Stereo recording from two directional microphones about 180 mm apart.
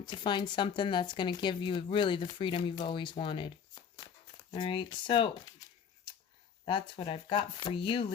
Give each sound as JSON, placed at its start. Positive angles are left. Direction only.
{"t": 0.0, "sound": "speech", "side_deg": 25}
{"t": 6.1, "sound": "a sound", "side_deg": 25}
{"t": 6.7, "sound": "speech", "side_deg": 30}